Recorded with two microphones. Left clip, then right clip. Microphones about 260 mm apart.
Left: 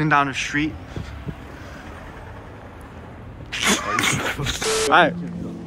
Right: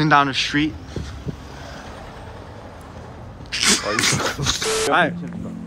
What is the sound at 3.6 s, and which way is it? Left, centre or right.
Speech, centre.